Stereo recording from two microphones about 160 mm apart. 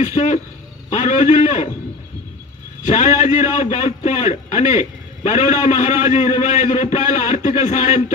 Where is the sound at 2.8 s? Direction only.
45° left (ahead or behind).